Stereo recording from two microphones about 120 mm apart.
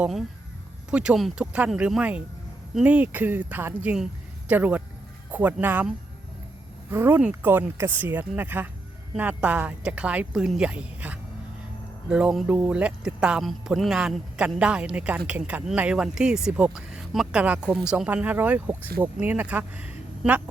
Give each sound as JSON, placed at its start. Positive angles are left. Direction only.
{"t": 0.0, "sound": "speech", "side_deg": 0}
{"t": 6.9, "sound": "speech", "side_deg": -15}